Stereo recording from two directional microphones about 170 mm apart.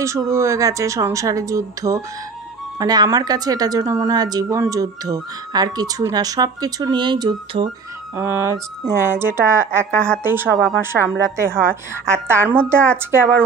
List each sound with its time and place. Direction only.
0.0 s speech: 15° right (ahead or behind)
8.2 s speech: 15° right (ahead or behind)
9.9 s a woman's voice: 5° left (ahead or behind)
10.2 s speech: 15° right (ahead or behind)